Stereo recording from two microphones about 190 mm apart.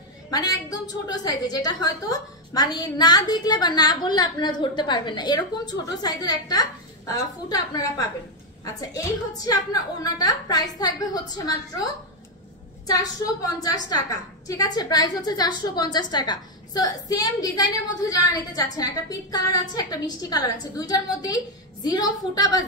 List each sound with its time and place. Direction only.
0.3 s a woman's voice: 20° left (ahead or behind)